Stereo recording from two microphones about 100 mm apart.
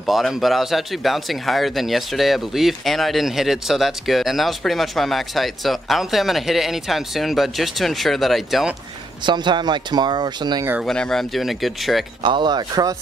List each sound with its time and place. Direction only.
0.0 s speech: centre (ahead or behind)
9.2 s speech: 50° right (ahead or behind)
10.8 s speech: 5° left (ahead or behind)
12.2 s speech: 50° right (ahead or behind)